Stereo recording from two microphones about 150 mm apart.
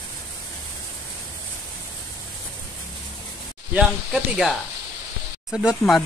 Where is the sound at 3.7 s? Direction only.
5° right (ahead or behind).